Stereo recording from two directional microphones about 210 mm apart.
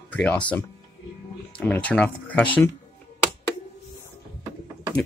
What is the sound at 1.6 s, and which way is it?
Speech, 5° left (ahead or behind).